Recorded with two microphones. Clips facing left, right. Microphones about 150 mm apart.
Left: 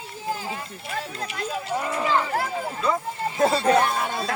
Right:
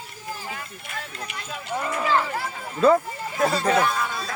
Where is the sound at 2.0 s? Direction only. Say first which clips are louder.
Right 1 dB; 20° left (ahead or behind).